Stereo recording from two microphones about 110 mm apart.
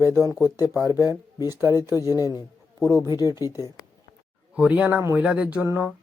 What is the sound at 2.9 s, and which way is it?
Speech, 35° left (ahead or behind).